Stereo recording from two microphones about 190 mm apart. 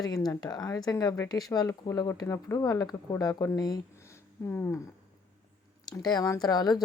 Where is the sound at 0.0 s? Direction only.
20° left (ahead or behind).